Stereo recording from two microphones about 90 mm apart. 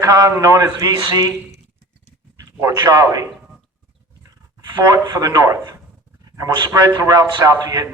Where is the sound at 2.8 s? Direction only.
40° right (ahead or behind).